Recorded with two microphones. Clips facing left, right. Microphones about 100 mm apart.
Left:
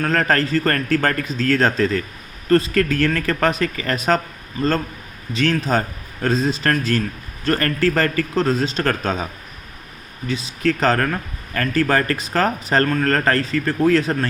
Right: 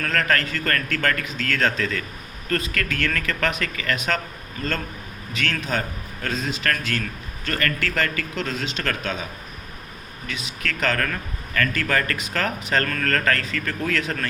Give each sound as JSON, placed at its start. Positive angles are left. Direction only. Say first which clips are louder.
{"t": 0.0, "sound": "speech", "louder": "left 5 dB", "side_deg": 35}
{"t": 5.3, "sound": "speech", "louder": "left 7 dB", "side_deg": 35}
{"t": 10.2, "sound": "speech", "louder": "left 10 dB", "side_deg": 30}